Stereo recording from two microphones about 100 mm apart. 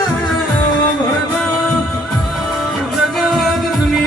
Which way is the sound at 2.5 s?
5° right (ahead or behind).